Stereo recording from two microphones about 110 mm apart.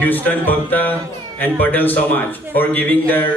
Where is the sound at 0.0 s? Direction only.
15° left (ahead or behind).